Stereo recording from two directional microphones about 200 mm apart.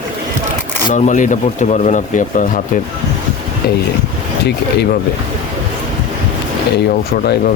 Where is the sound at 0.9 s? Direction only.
40° left (ahead or behind).